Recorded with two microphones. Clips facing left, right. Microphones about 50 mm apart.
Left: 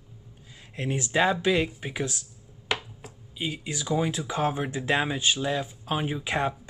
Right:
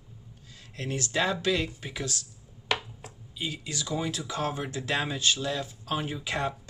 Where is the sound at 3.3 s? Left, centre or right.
Left.